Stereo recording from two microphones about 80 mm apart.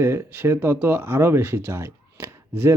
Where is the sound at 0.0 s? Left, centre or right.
Right.